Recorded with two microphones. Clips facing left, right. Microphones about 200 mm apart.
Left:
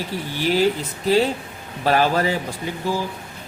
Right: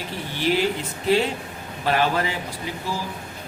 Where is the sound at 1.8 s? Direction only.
40° left (ahead or behind).